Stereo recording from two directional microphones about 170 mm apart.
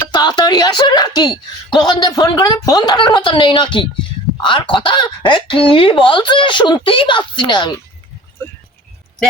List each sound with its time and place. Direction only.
0.1 s speech: 25° left (ahead or behind)